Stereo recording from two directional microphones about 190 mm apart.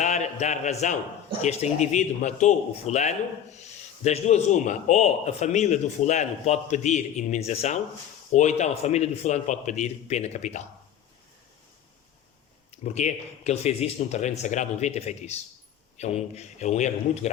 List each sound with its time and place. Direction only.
0.0 s a man's voice: 40° left (ahead or behind)
12.8 s a man's voice: 35° left (ahead or behind)